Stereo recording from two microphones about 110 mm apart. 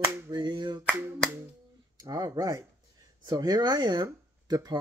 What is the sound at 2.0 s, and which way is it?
Speech, 35° right (ahead or behind).